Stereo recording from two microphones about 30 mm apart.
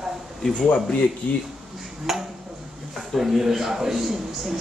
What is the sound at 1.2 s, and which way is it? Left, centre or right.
Speech, left.